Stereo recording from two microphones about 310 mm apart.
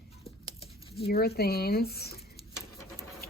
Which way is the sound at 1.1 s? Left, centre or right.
Left.